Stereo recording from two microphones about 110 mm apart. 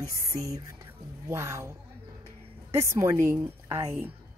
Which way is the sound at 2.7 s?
25° right (ahead or behind).